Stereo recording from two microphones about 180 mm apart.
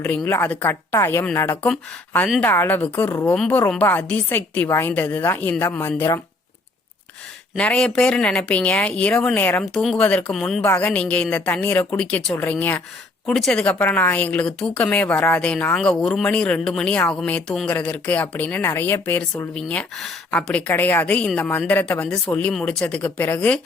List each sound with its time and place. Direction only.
0.0 s a woman's voice: 10° left (ahead or behind)
7.5 s a woman's voice: 5° left (ahead or behind)